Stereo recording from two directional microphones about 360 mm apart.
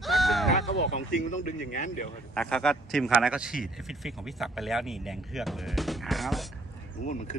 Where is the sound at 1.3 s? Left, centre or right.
Left.